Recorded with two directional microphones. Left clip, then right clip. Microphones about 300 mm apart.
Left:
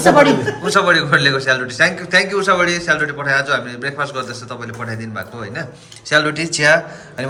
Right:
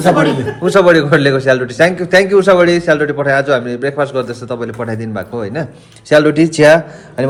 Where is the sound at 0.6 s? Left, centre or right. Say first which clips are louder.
Right 7 dB; centre.